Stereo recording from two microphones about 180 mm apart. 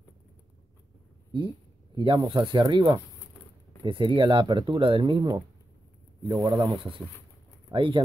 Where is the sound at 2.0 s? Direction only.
25° right (ahead or behind).